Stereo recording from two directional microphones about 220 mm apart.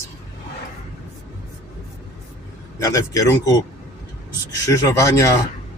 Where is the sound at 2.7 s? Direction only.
15° left (ahead or behind).